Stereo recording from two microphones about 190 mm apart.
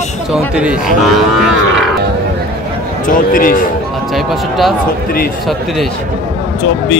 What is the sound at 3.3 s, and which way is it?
Speech, 50° left (ahead or behind).